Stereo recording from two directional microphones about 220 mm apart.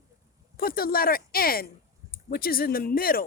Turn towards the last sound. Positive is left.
turn(degrees=40)  # may be behind; listen again after turning